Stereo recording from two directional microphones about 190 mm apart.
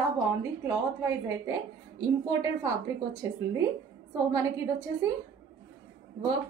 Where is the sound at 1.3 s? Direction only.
15° right (ahead or behind).